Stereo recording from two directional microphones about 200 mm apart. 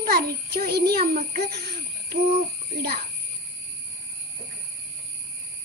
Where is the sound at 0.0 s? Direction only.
50° right (ahead or behind).